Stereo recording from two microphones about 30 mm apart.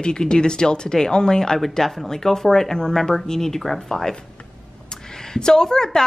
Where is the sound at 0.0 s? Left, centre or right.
Left.